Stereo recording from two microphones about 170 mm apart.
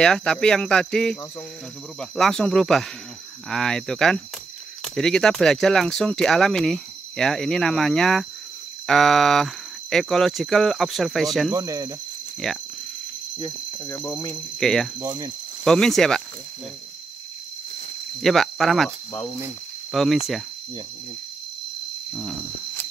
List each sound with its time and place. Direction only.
0.0 s speech: 5° left (ahead or behind)
11.5 s speech: 20° right (ahead or behind)
12.4 s speech: centre (ahead or behind)
13.4 s speech: 15° left (ahead or behind)
14.6 s speech: centre (ahead or behind)
15.0 s speech: 20° right (ahead or behind)
15.6 s speech: 5° left (ahead or behind)
18.2 s speech: centre (ahead or behind)
19.9 s speech: centre (ahead or behind)